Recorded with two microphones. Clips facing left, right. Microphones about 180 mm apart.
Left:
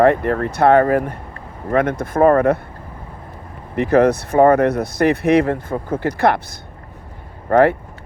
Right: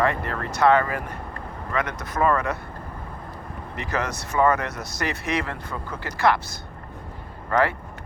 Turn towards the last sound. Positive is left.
turn(degrees=55)  # may be behind; listen again after turning